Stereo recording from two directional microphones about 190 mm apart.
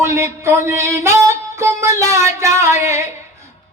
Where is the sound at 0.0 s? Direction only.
15° right (ahead or behind).